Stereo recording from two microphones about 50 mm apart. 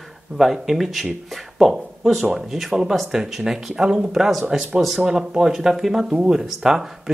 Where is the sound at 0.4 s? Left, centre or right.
Centre.